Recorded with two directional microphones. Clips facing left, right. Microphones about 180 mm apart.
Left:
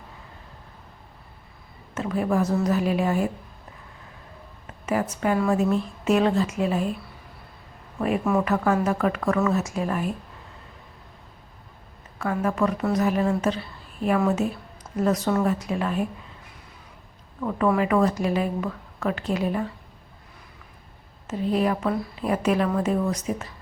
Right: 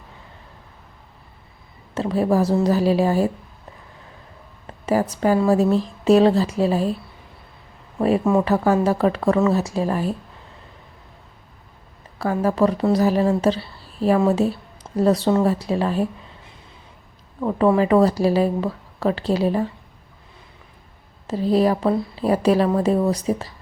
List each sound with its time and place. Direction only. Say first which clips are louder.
2.0 s speech: right 5 dB; 30° right (ahead or behind)
4.6 s speech: right 5 dB; 35° right (ahead or behind)
7.9 s speech: right 5 dB; 30° right (ahead or behind)
12.2 s speech: right 5 dB; 30° right (ahead or behind)
21.2 s speech: right 5 dB; 35° right (ahead or behind)